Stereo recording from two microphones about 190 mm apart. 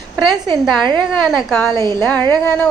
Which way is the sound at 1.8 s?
15° left (ahead or behind).